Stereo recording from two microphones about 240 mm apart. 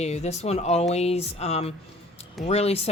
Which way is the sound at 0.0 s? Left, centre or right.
Left.